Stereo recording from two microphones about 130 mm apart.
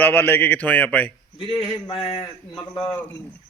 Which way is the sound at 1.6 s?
40° left (ahead or behind).